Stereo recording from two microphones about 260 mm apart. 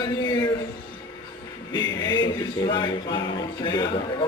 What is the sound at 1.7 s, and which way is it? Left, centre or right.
Speech, centre.